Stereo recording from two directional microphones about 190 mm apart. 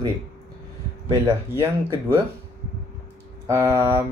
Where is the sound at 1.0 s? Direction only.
15° right (ahead or behind).